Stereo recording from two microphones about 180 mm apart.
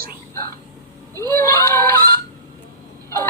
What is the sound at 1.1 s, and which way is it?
Speech, 15° left (ahead or behind).